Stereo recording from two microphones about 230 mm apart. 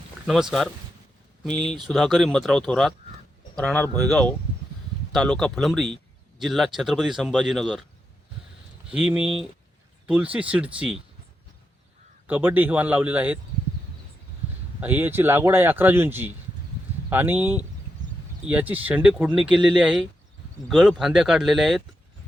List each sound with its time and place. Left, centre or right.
0.3 s speech: centre
8.9 s speech: centre
12.3 s speech: centre
14.8 s speech: centre